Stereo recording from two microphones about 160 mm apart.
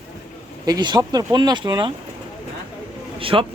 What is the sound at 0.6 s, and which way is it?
Speech, 25° right (ahead or behind).